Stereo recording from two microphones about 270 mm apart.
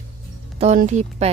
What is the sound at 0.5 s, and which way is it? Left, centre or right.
Speech, right.